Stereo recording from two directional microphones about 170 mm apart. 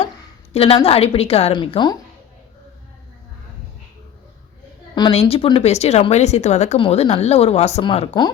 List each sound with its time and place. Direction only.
0.5 s a woman's voice: 35° left (ahead or behind)
4.9 s speech: 30° left (ahead or behind)